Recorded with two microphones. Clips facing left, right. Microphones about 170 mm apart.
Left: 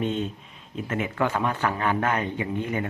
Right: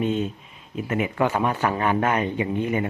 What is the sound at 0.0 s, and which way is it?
Speech, 5° right (ahead or behind).